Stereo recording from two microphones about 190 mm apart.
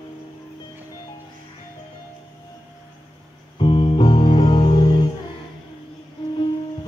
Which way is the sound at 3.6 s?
30° left (ahead or behind).